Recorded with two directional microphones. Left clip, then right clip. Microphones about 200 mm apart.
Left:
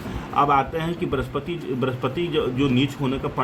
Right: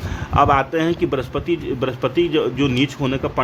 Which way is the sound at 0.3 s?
60° right (ahead or behind).